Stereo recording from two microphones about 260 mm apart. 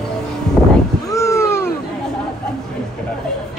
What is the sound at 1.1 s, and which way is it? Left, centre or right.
Cat, centre.